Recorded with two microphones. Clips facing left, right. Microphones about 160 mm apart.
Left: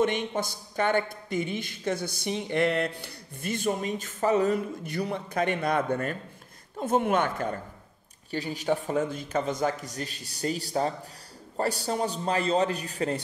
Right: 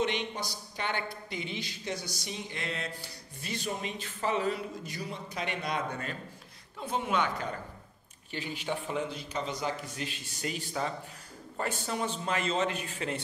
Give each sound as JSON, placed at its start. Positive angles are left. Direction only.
{"t": 0.0, "sound": "speech", "side_deg": 50}
{"t": 4.8, "sound": "speech", "side_deg": 60}
{"t": 8.3, "sound": "a man's voice", "side_deg": 40}